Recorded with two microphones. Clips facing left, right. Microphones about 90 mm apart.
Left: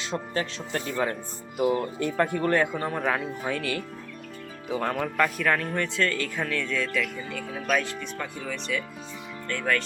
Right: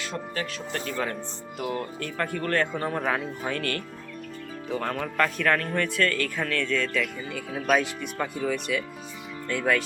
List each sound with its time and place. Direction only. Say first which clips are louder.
0.0 s speech: left 2 dB; 25° left (ahead or behind)
2.7 s speech: even; centre (ahead or behind)
7.5 s speech: right 3 dB; 15° right (ahead or behind)